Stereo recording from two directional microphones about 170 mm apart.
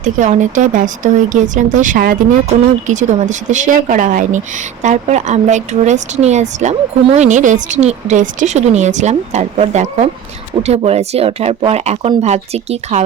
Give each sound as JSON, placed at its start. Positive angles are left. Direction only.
{"t": 0.0, "sound": "speech", "side_deg": -45}